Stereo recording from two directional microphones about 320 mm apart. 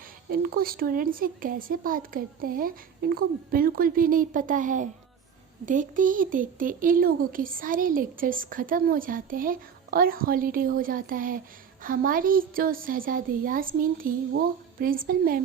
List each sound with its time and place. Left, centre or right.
0.3 s speech: right